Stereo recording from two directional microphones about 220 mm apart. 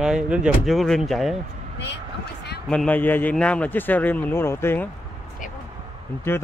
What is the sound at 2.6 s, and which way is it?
A man's voice, 5° left (ahead or behind).